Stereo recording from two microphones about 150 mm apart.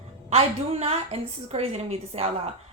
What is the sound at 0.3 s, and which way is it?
A woman's voice, 40° right (ahead or behind).